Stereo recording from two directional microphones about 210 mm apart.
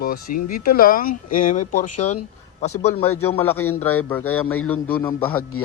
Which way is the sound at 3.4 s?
10° left (ahead or behind).